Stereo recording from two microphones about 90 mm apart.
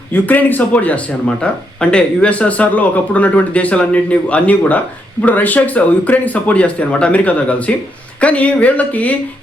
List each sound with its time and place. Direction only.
0.1 s speech: 20° left (ahead or behind)